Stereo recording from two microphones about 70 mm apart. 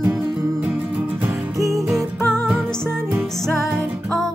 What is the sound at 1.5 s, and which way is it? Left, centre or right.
Music, right.